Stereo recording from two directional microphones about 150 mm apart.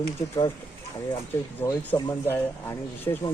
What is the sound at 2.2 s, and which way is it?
Speech, 15° left (ahead or behind).